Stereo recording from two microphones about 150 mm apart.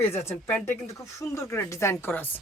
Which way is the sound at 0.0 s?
15° left (ahead or behind).